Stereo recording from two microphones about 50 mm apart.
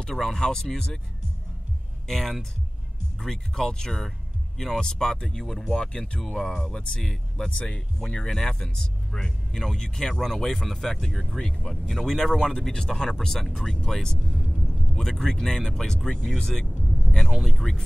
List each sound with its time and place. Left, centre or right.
0.1 s speech: centre
2.0 s speech: centre
5.4 s speech: centre
5.7 s speech: centre
14.4 s vehicle: centre
14.9 s speech: centre